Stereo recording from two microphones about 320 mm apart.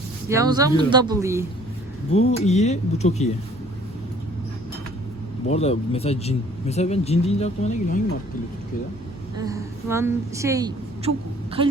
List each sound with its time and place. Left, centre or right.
0.3 s a woman's voice: centre
2.1 s speech: centre
5.5 s speech: centre
9.5 s a woman's voice: centre